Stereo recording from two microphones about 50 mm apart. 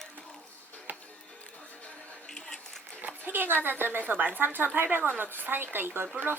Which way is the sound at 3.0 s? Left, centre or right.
Right.